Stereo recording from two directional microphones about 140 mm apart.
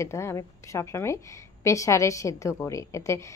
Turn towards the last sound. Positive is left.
turn(degrees=20)  # may be behind; listen again after turning